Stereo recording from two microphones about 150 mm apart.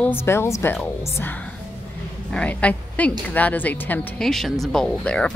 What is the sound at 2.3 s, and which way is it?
A woman's voice, 10° left (ahead or behind).